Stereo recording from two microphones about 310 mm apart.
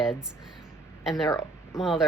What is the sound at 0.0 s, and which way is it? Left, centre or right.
Speech, centre.